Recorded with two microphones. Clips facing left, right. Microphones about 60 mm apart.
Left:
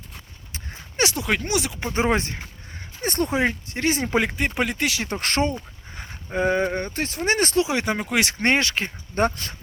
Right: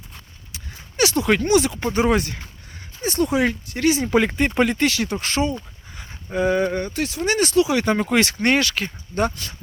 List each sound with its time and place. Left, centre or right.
0.5 s a sound: left
1.1 s speech: centre
1.9 s speech: left
3.0 s a sound: left
3.2 s speech: left
4.2 s speech: centre
5.2 s speech: left
6.0 s a sound: left
6.7 s speech: left
7.9 s speech: centre
8.2 s speech: left
9.2 s speech: left